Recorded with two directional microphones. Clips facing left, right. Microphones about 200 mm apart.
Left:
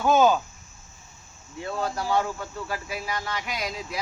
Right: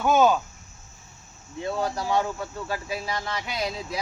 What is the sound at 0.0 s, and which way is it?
Speech, centre (ahead or behind).